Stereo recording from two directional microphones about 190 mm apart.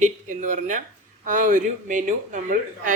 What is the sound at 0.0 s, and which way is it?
Speech, 40° right (ahead or behind).